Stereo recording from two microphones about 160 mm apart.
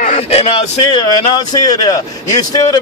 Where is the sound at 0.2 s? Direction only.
40° left (ahead or behind).